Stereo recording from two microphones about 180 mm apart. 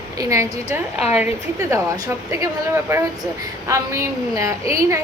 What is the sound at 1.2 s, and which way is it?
A woman's voice, 15° right (ahead or behind).